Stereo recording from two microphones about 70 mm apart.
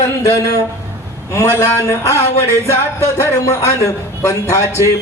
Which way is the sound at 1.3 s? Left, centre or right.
Left.